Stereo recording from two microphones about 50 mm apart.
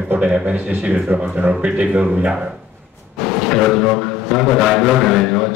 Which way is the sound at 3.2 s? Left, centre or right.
Centre.